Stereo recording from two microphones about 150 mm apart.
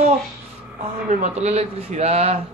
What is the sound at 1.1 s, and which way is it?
Speech, 50° right (ahead or behind).